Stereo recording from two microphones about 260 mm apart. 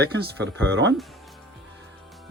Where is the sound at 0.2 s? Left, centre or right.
Right.